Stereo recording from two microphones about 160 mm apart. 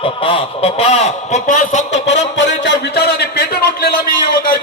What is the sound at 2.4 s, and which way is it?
A man's voice, 90° left.